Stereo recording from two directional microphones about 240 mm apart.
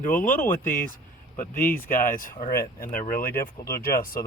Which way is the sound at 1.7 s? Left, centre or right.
Left.